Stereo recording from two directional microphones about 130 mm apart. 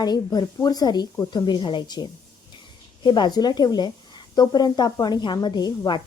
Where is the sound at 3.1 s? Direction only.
35° left (ahead or behind).